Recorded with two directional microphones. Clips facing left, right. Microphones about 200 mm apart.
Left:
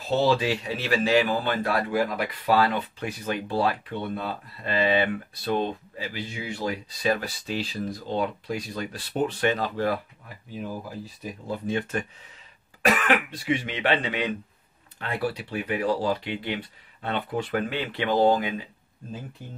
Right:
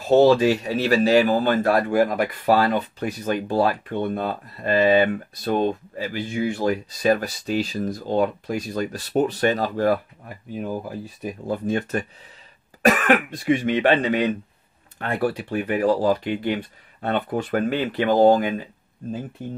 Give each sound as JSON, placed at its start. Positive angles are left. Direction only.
{"t": 0.0, "sound": "speech", "side_deg": -45}